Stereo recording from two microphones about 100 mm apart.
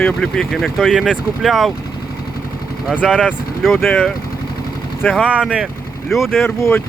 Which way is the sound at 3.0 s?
10° left (ahead or behind).